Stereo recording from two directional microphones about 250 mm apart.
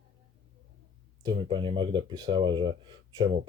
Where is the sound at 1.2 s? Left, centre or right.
Centre.